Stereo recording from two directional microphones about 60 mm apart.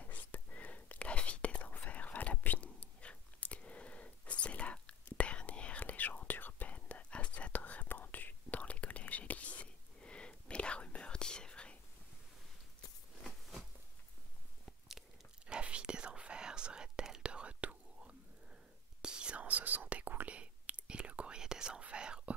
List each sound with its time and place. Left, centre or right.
0.0 s whispering: left
14.9 s whispering: centre